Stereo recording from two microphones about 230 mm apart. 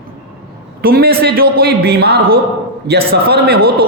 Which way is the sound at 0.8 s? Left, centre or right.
Right.